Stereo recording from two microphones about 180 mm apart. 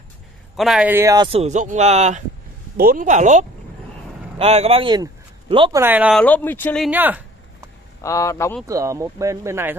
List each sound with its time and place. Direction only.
0.6 s speech: 5° right (ahead or behind); by 2.2 s 40° right (ahead or behind)
2.8 s a man's voice: 50° right (ahead or behind); by 5.8 s 25° right (ahead or behind)
5.8 s speech: 10° right (ahead or behind)
6.1 s speech: 10° left (ahead or behind)
6.8 s speech: 10° right (ahead or behind)
8.0 s speech: 15° left (ahead or behind)
8.6 s speech: 15° right (ahead or behind)